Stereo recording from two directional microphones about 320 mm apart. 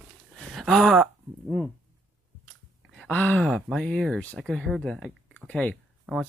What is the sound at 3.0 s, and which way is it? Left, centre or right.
Speech, centre.